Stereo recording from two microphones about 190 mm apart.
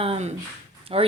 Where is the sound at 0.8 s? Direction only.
30° right (ahead or behind).